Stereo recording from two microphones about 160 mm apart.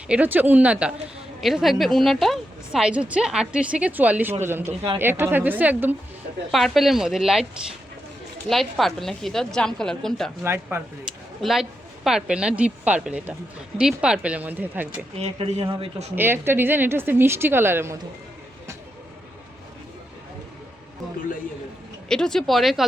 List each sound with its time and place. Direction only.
0.1 s a woman's voice: 10° right (ahead or behind)
6.5 s a woman's voice: centre (ahead or behind)
8.4 s a woman's voice: centre (ahead or behind)
10.4 s speech: 15° right (ahead or behind)
11.3 s speech: centre (ahead or behind)
15.2 s speech: 40° right (ahead or behind)
16.1 s speech: 15° right (ahead or behind)
22.1 s a woman's voice: 5° left (ahead or behind)